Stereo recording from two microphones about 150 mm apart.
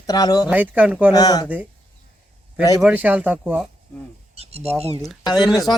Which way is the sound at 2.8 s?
10° right (ahead or behind).